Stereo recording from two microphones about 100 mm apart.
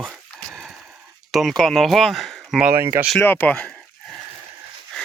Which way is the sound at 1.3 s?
Centre (ahead or behind).